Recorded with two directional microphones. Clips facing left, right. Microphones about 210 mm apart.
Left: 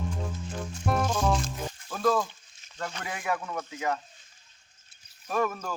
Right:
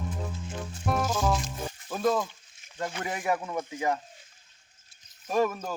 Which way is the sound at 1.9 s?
20° right (ahead or behind).